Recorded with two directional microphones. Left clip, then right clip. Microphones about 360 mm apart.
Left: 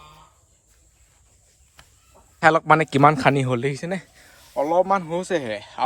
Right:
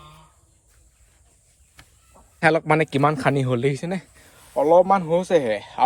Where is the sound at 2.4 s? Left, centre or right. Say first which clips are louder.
Left 2 dB; centre.